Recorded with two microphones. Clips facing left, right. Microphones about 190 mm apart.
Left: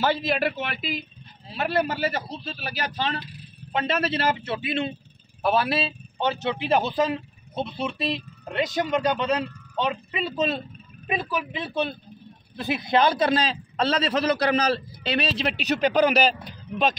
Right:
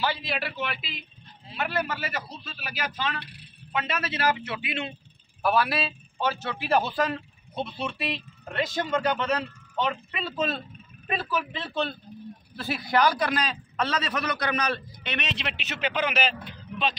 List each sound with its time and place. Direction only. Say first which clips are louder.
0.0 s a man's voice: left 6 dB; 45° left (ahead or behind)